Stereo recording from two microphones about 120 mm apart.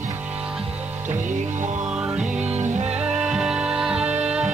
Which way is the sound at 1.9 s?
5° right (ahead or behind).